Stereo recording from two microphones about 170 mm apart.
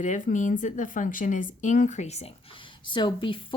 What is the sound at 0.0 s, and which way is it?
Speech, 45° left (ahead or behind).